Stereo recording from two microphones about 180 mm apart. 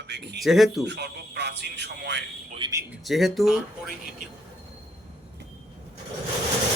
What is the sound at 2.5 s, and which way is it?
Speech, 25° right (ahead or behind).